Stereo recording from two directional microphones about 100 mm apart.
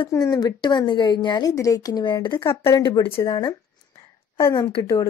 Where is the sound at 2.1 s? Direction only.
50° left (ahead or behind).